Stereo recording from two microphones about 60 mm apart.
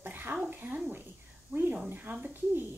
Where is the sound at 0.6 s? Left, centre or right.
Right.